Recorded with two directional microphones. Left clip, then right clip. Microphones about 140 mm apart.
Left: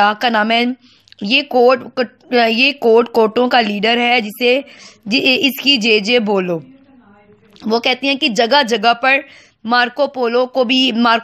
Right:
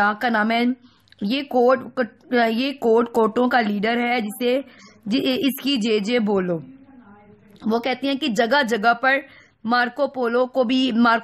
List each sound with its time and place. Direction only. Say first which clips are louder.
0.0 s a woman's voice: left 6 dB; 15° left (ahead or behind)
7.6 s a woman's voice: left 7 dB; 15° left (ahead or behind)